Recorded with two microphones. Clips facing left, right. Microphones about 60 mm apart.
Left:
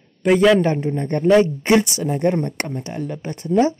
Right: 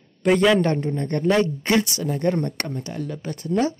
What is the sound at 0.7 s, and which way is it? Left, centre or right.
Speech, centre.